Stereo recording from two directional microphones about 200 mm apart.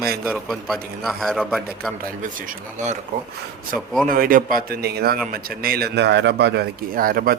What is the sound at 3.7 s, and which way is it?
Speech, centre (ahead or behind).